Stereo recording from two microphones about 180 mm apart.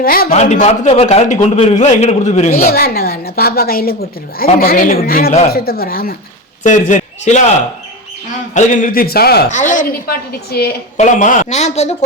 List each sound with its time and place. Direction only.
0.0 s a woman's voice: 55° left (ahead or behind)
0.3 s a man's voice: 40° left (ahead or behind)
2.6 s a woman's voice: 55° left (ahead or behind)
6.6 s a man's voice: 45° left (ahead or behind)
8.5 s a woman's voice: 45° left (ahead or behind)
9.5 s a woman's voice: 45° left (ahead or behind); by 10.8 s 60° left (ahead or behind)
10.9 s a man's voice: 45° left (ahead or behind)